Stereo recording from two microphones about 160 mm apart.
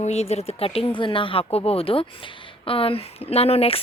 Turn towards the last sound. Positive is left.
turn(degrees=40)  # may be behind; listen again after turning